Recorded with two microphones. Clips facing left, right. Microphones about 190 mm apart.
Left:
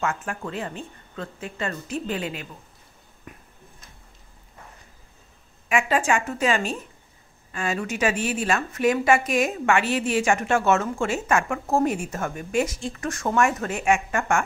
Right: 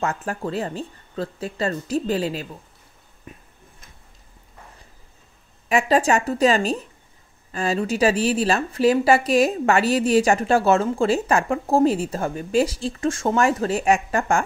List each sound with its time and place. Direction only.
0.0 s speech: 35° right (ahead or behind)
3.3 s a sound: 25° right (ahead or behind)
5.7 s speech: 35° right (ahead or behind)